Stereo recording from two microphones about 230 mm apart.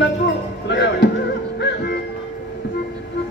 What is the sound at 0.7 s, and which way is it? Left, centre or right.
Music, left.